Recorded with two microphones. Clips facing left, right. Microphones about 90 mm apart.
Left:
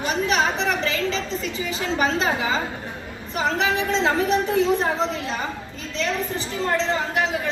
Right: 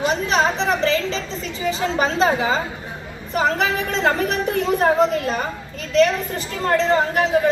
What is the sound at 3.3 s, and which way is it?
A woman's voice, 50° right (ahead or behind).